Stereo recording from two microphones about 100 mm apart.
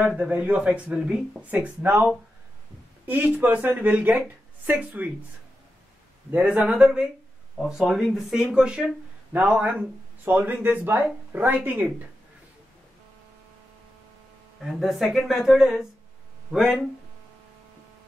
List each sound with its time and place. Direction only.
0.3 s speech: 15° right (ahead or behind)
1.5 s speech: 20° right (ahead or behind)
3.1 s speech: 15° right (ahead or behind)
6.3 s speech: 15° right (ahead or behind)
14.7 s speech: 5° right (ahead or behind)